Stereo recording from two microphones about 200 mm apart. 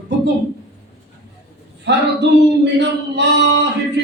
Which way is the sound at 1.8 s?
60° right (ahead or behind).